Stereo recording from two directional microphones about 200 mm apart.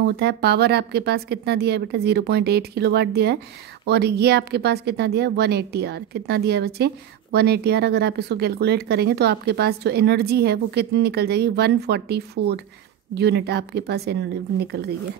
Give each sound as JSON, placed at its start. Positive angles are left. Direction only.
{"t": 0.2, "sound": "speech", "side_deg": -55}